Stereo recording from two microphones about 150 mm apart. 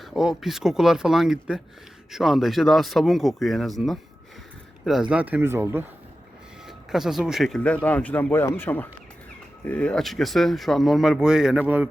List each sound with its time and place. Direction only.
0.0 s speech: centre (ahead or behind)
6.7 s speech: centre (ahead or behind)